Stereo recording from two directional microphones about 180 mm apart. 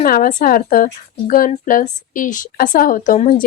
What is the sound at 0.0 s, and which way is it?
A woman's voice, 50° left (ahead or behind).